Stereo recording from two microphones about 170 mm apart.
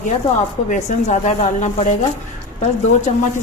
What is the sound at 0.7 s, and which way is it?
Speech, 40° left (ahead or behind).